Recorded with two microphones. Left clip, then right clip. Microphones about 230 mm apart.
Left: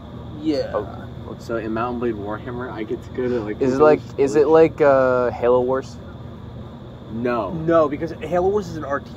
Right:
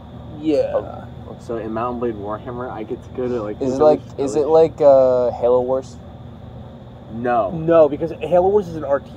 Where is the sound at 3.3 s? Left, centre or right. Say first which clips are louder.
Left 2 dB; centre.